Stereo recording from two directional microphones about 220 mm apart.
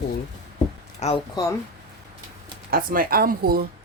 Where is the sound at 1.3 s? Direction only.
15° left (ahead or behind).